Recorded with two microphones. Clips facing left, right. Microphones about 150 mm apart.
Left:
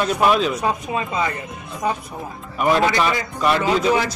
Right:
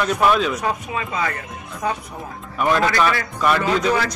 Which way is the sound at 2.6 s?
20° left (ahead or behind).